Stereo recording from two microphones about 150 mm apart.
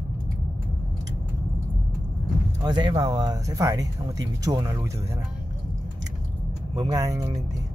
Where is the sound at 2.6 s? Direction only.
30° right (ahead or behind).